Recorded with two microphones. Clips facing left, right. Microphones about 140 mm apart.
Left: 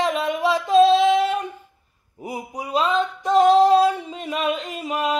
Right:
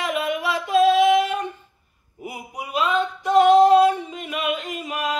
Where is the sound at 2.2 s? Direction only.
35° left (ahead or behind).